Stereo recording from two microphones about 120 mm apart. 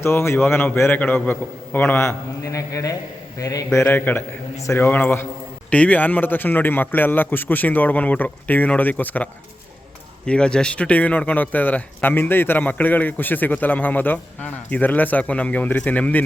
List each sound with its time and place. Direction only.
0.0 s a man's voice: 20° left (ahead or behind)